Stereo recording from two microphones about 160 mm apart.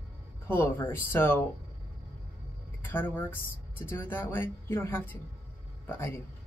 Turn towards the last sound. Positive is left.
turn(degrees=15)  # may be behind; listen again after turning